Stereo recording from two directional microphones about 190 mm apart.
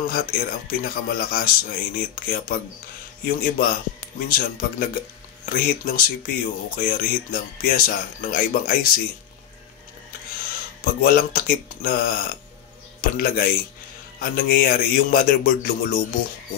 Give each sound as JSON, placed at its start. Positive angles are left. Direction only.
{"t": 0.0, "sound": "speech", "side_deg": 50}
{"t": 10.8, "sound": "speech", "side_deg": 50}